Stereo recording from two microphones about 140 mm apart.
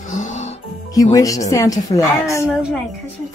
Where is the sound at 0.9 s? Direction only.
25° left (ahead or behind).